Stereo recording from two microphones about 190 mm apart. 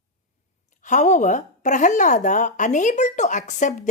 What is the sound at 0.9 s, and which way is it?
Speech, 40° left (ahead or behind).